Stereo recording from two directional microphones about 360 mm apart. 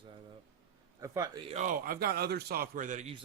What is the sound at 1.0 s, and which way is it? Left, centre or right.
A man's voice, centre.